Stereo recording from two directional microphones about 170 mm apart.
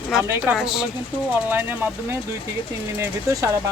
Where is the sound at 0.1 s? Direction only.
5° right (ahead or behind).